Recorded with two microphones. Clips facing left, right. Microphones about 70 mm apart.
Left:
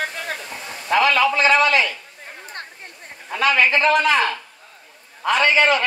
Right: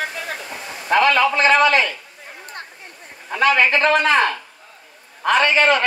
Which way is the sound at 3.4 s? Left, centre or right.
Right.